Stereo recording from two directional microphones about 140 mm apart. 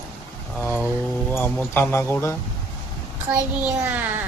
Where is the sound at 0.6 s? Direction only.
15° left (ahead or behind).